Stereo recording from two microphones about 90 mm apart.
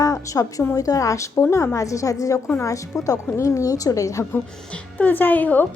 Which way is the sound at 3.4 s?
35° left (ahead or behind).